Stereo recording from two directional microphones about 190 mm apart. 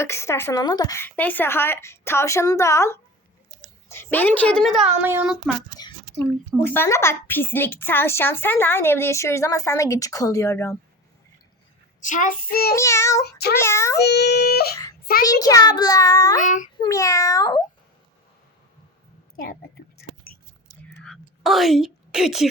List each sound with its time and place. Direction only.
0.0 s a woman's voice: 15° left (ahead or behind); by 5.4 s 10° right (ahead or behind)
5.8 s a sound: 20° left (ahead or behind)
6.6 s a woman's voice: 10° left (ahead or behind)
11.9 s child singing: 40° left (ahead or behind)
12.7 s a woman's voice: 15° left (ahead or behind)
13.2 s a sound: 55° left (ahead or behind)
13.6 s a woman's voice: 15° left (ahead or behind)
14.0 s a sound: 60° left (ahead or behind)
15.2 s a child's voice: 20° left (ahead or behind)
16.4 s a child's voice: 40° left (ahead or behind)
16.7 s a woman's voice: 20° left (ahead or behind)
19.4 s whispering: 55° left (ahead or behind)
21.0 s a sound: centre (ahead or behind)